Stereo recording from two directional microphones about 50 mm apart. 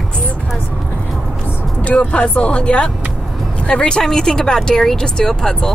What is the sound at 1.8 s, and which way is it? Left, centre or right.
Speech, left.